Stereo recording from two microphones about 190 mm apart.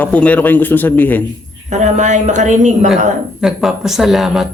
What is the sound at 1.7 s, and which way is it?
A woman's voice, 40° right (ahead or behind).